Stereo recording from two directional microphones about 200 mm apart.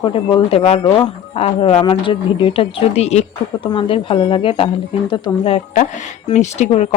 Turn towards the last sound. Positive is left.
turn(degrees=35)  # may be behind; listen again after turning